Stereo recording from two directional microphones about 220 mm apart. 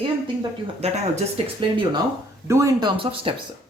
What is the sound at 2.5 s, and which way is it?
Speech, 15° right (ahead or behind).